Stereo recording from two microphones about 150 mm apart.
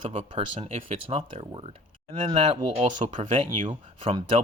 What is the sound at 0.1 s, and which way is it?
Speech, 40° right (ahead or behind).